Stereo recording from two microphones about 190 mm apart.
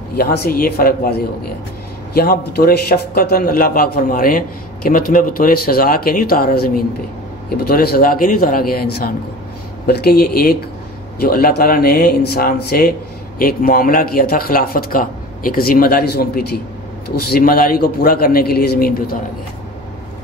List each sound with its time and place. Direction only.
0.2 s a man's voice: 55° left (ahead or behind)
2.1 s a man's voice: 50° left (ahead or behind)